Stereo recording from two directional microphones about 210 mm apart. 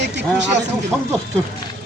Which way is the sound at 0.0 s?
55° right (ahead or behind).